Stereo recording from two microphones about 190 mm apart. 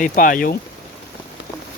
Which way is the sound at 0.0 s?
45° left (ahead or behind).